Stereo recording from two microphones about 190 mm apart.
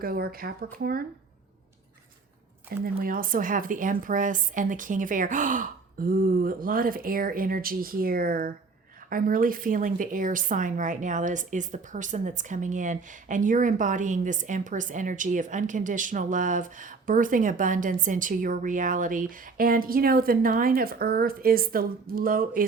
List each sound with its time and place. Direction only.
0.0 s speech: 50° right (ahead or behind)
3.0 s speech: 45° right (ahead or behind)